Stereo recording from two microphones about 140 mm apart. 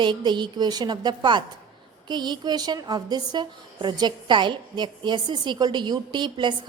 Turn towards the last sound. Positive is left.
turn(degrees=-35)  # may be behind; listen again after turning